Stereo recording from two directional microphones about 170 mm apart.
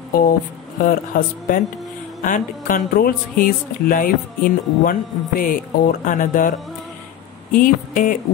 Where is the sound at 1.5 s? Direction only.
55° left (ahead or behind).